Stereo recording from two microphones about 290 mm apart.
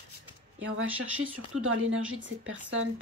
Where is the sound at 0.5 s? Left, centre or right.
Right.